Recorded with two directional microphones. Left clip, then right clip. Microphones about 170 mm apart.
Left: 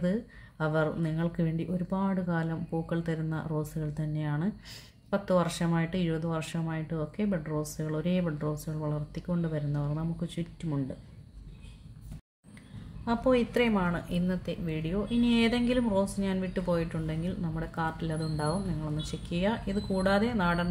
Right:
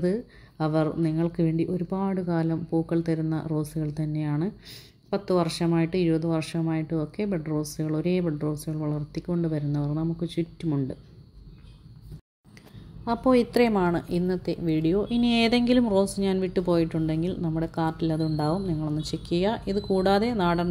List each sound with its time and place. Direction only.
0.0 s speech: 20° right (ahead or behind)
13.0 s a woman's voice: 30° right (ahead or behind)